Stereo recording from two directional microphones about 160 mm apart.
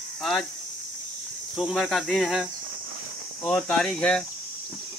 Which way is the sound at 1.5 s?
Centre (ahead or behind).